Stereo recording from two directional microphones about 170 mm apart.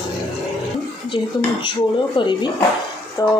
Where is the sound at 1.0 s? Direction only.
30° left (ahead or behind).